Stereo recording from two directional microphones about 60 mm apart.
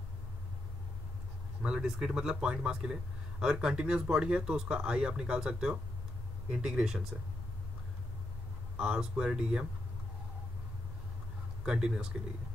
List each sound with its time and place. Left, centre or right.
1.6 s speech: centre
8.7 s speech: centre
11.6 s speech: centre